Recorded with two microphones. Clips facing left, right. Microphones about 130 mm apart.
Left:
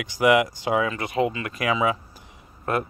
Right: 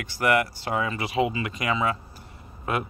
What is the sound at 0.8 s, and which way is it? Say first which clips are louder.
Speech: left 1 dB; 5° right (ahead or behind).